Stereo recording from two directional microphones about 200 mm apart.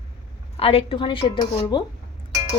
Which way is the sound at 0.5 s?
30° left (ahead or behind).